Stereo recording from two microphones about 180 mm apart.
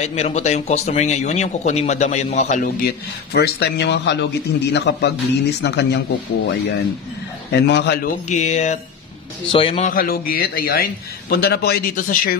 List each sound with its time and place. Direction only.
0.0 s speech: 35° left (ahead or behind)
3.3 s speech: 65° left (ahead or behind)
8.3 s speech: 40° left (ahead or behind)
9.8 s a man's voice: 55° left (ahead or behind)